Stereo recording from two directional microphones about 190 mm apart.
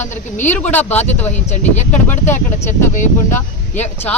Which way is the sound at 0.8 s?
35° left (ahead or behind).